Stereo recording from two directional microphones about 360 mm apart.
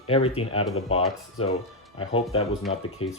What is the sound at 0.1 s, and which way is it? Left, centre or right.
Speech, centre.